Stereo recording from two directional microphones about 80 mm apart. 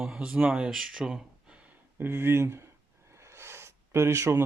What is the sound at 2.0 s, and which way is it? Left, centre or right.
Speech, right.